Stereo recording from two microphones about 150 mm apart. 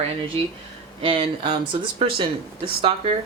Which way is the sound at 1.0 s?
35° right (ahead or behind).